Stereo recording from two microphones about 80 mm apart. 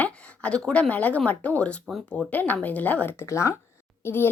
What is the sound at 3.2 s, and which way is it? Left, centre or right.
A child's voice, left.